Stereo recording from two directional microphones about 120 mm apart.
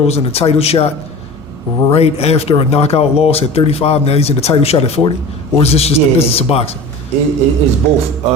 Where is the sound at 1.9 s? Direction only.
55° left (ahead or behind).